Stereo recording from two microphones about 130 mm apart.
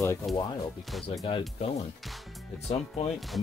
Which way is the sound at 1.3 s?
40° left (ahead or behind).